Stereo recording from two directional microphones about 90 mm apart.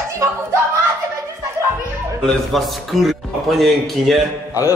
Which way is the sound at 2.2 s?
5° left (ahead or behind).